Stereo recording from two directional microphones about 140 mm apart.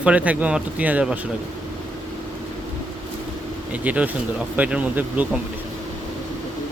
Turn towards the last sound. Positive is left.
turn(degrees=-10)  # may be behind; listen again after turning